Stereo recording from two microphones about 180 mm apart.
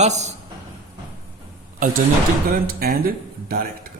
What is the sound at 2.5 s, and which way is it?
Speech, 55° right (ahead or behind).